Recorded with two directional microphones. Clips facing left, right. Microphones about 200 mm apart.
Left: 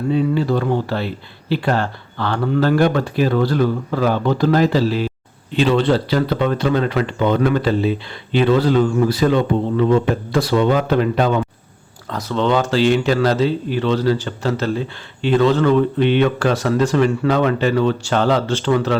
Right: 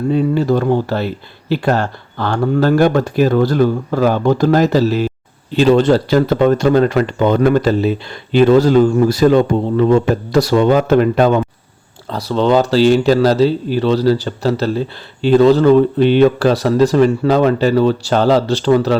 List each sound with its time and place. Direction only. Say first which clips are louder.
0.1 s speech: right 3 dB; 45° right (ahead or behind)
12.0 s speech: right 4 dB; 35° right (ahead or behind)